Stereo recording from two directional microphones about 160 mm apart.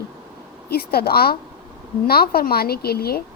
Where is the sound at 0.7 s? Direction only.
75° left (ahead or behind).